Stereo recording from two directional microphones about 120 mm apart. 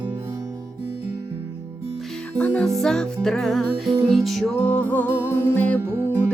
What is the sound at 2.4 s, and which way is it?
Music, 15° left (ahead or behind).